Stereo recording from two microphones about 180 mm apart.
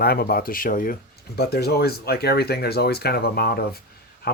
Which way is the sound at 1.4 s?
65° left (ahead or behind).